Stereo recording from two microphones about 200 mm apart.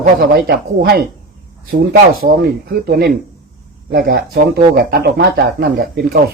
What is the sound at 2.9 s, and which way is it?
Speech, 55° right (ahead or behind).